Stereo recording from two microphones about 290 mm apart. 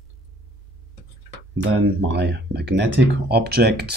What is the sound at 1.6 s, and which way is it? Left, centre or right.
Speech, right.